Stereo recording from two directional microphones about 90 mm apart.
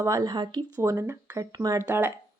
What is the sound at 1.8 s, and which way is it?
Speech, 20° right (ahead or behind).